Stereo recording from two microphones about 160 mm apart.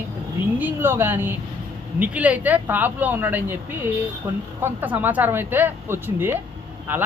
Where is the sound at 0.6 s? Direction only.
15° right (ahead or behind).